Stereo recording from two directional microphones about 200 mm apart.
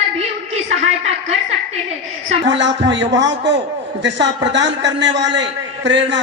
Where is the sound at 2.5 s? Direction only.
65° right (ahead or behind).